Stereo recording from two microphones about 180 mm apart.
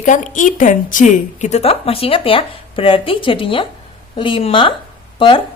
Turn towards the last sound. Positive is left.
turn(degrees=30)  # may be behind; listen again after turning